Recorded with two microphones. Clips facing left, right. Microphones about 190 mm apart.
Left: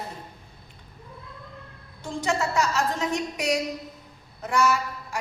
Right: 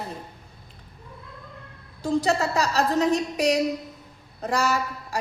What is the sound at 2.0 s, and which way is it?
A woman's voice, 35° right (ahead or behind).